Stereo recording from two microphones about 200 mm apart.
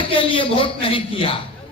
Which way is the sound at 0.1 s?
25° left (ahead or behind).